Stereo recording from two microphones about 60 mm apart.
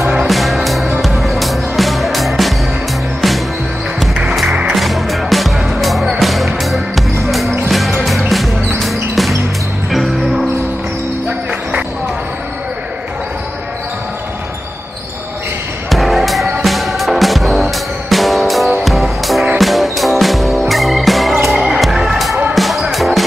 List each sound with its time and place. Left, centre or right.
0.3 s music: centre
4.1 s music: centre
4.7 s music: centre
15.9 s music: centre